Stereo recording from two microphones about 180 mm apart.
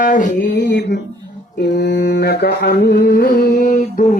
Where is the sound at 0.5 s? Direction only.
75° left (ahead or behind).